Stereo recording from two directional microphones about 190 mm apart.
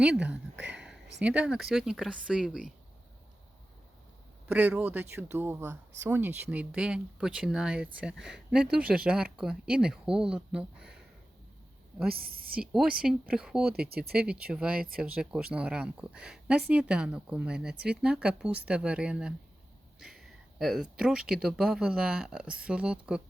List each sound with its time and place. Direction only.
0.0 s speech: 5° right (ahead or behind)
0.7 s a sound: 5° right (ahead or behind)
1.2 s speech: 5° right (ahead or behind)
4.4 s speech: 10° right (ahead or behind)
12.0 s a woman's voice: 55° right (ahead or behind)
12.5 s speech: 5° right (ahead or behind)
13.7 s speech: 55° right (ahead or behind)
14.5 s speech: 5° right (ahead or behind)